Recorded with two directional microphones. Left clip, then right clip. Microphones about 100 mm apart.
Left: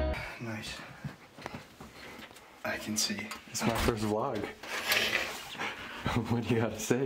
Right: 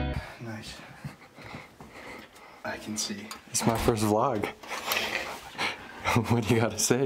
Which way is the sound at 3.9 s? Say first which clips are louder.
Right 7 dB; 55° right (ahead or behind).